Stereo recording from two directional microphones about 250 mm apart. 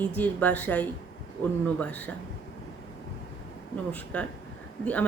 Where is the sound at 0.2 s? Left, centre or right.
Centre.